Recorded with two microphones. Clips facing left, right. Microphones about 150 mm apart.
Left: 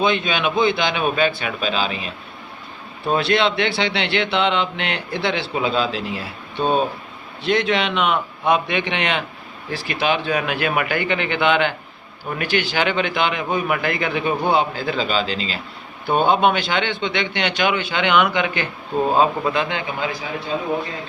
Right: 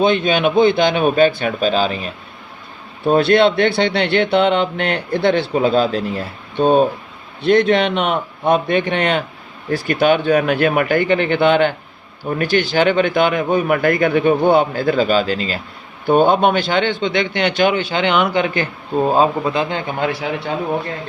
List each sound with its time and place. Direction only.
0.0 s speech: 50° right (ahead or behind)
3.1 s speech: 50° right (ahead or behind)
20.0 s a man's voice: 70° right (ahead or behind)